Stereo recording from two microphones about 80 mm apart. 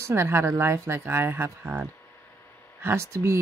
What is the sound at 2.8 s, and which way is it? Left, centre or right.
Speech, right.